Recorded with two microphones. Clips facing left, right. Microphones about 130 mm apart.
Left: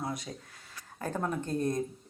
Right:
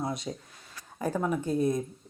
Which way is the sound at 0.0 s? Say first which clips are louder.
Right 4 dB; 25° right (ahead or behind).